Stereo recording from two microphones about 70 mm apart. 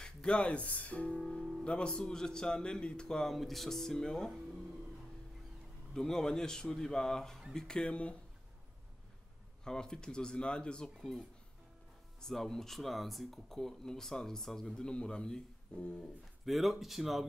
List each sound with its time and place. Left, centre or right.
0.0 s a man's voice: centre
5.9 s a man's voice: centre
9.7 s a man's voice: centre
11.0 s speech: centre
16.4 s speech: centre